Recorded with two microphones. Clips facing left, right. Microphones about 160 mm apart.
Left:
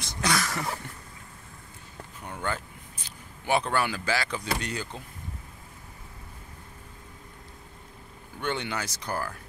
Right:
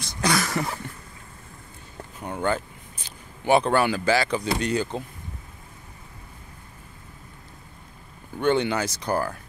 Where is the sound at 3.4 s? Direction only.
25° right (ahead or behind).